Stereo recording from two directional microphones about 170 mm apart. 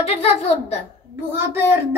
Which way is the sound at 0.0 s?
40° left (ahead or behind).